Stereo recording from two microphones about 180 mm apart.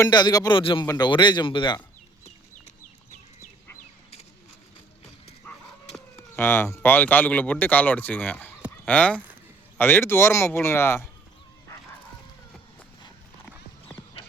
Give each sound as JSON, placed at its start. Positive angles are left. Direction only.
{"t": 0.0, "sound": "a man's voice", "side_deg": 25}
{"t": 6.3, "sound": "speech", "side_deg": 10}
{"t": 13.4, "sound": "clip-clop", "side_deg": 10}